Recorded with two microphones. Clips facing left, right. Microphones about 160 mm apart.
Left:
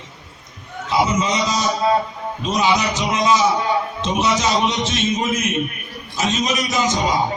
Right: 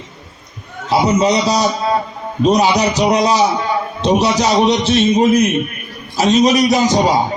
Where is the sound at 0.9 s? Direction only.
40° right (ahead or behind).